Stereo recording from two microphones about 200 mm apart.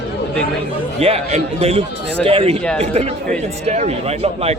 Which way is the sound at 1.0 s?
30° right (ahead or behind).